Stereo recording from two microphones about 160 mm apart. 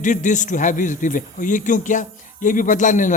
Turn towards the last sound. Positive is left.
turn(degrees=50)  # may be behind; listen again after turning